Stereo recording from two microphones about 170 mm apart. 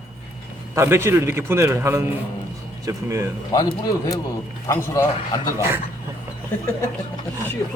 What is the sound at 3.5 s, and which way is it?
A man's voice, 20° left (ahead or behind).